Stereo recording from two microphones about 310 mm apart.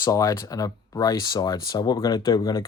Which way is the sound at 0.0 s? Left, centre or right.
Centre.